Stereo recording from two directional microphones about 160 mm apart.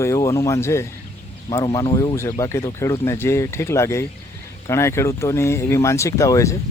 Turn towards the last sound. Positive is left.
turn(degrees=20)  # may be behind; listen again after turning